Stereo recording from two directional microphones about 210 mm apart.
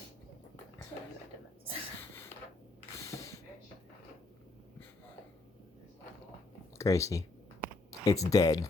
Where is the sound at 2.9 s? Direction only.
15° left (ahead or behind).